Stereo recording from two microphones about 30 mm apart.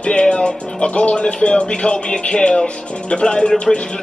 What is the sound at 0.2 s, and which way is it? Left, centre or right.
Music, left.